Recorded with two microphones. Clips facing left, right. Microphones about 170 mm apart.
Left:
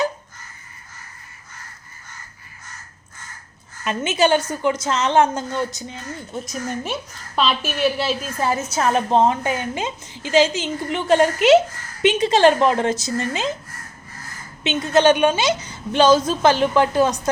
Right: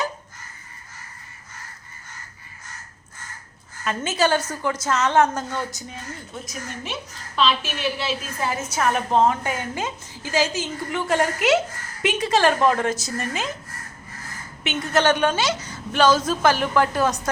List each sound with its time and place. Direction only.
3.8 s a woman's voice: 20° left (ahead or behind)
7.3 s a woman's voice: 45° left (ahead or behind); by 13.5 s 25° left (ahead or behind)
14.6 s a woman's voice: 20° left (ahead or behind)